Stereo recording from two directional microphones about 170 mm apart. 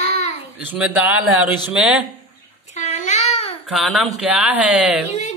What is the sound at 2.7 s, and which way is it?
Babbling, 45° left (ahead or behind).